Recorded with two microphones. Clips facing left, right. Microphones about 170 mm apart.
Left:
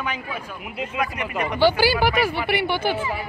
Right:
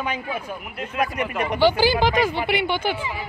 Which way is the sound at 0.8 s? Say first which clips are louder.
Right 2 dB; 10° left (ahead or behind).